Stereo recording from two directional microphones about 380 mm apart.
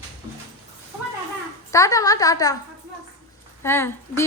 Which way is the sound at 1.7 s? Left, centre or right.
Centre.